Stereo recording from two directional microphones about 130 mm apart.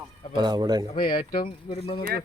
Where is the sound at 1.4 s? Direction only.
45° left (ahead or behind).